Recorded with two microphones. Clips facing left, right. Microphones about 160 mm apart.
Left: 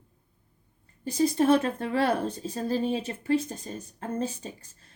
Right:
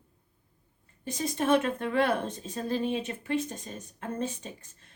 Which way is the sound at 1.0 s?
35° left (ahead or behind).